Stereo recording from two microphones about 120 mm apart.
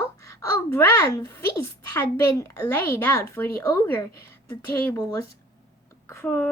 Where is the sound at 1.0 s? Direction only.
30° left (ahead or behind).